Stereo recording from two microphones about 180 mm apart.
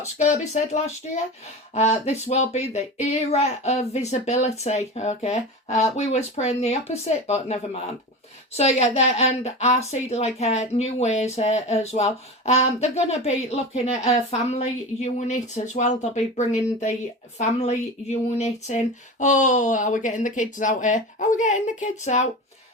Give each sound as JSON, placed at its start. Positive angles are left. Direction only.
{"t": 0.0, "sound": "a woman's voice", "side_deg": 40}